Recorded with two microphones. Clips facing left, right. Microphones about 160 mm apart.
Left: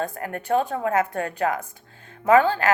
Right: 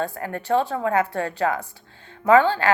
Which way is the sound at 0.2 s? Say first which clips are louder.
Right 1 dB; 30° right (ahead or behind).